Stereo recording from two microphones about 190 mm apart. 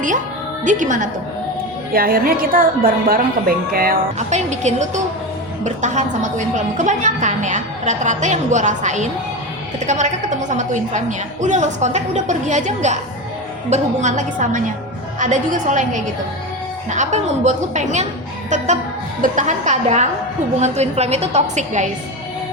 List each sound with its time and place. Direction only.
0.6 s a woman's voice: 40° right (ahead or behind)